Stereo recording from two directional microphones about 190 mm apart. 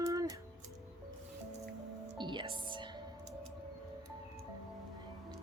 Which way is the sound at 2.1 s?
25° right (ahead or behind).